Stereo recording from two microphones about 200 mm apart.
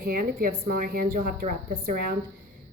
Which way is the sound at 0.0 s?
45° right (ahead or behind).